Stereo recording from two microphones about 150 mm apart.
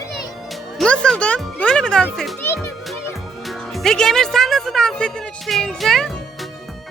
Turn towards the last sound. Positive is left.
turn(degrees=0)  # may be behind; listen again after turning